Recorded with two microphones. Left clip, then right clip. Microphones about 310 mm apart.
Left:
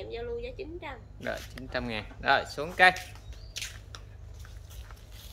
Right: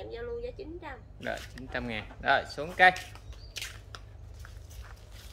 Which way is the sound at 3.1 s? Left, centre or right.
Centre.